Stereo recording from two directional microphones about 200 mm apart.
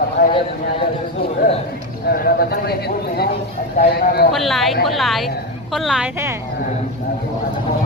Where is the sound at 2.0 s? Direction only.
50° left (ahead or behind).